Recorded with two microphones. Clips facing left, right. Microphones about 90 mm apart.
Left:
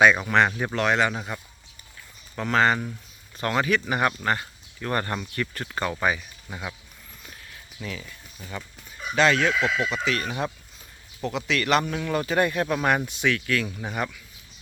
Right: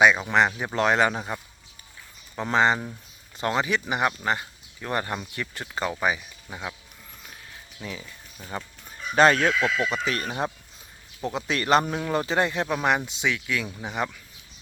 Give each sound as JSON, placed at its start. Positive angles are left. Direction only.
{"t": 0.0, "sound": "speech", "side_deg": -20}
{"t": 0.8, "sound": "speech", "side_deg": -35}
{"t": 2.4, "sound": "speech", "side_deg": -25}
{"t": 7.8, "sound": "speech", "side_deg": -15}
{"t": 9.1, "sound": "speech", "side_deg": -40}
{"t": 9.5, "sound": "speech", "side_deg": 0}
{"t": 10.1, "sound": "speech", "side_deg": -30}